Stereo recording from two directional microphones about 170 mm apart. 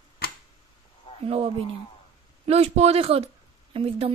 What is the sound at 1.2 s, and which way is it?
A woman's voice, 35° right (ahead or behind).